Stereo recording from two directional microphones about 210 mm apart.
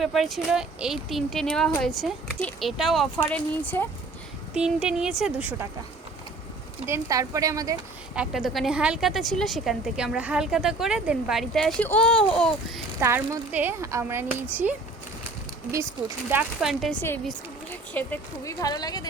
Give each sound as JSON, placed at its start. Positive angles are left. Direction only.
{"t": 0.0, "sound": "a woman's voice", "side_deg": 0}
{"t": 4.5, "sound": "a woman's voice", "side_deg": -5}
{"t": 6.8, "sound": "speech", "side_deg": -15}
{"t": 8.1, "sound": "a woman's voice", "side_deg": -5}
{"t": 13.0, "sound": "speech", "side_deg": -10}
{"t": 16.3, "sound": "a woman's voice", "side_deg": -5}